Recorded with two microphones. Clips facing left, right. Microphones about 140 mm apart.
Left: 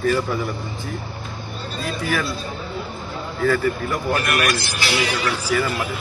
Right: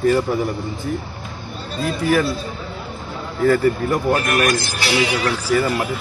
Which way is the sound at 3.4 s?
40° right (ahead or behind).